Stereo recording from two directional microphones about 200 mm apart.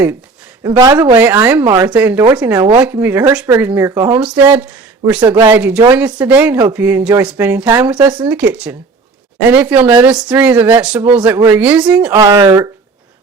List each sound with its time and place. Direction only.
0.6 s speech: 20° right (ahead or behind)
2.5 s speech: 20° right (ahead or behind)
12.2 s speech: 15° right (ahead or behind)